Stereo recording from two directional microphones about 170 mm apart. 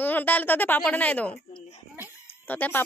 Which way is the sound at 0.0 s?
10° left (ahead or behind).